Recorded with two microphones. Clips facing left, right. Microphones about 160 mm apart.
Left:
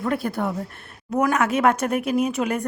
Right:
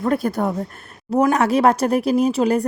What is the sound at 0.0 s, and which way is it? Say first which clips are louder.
Speech: right 4 dB; 40° right (ahead or behind).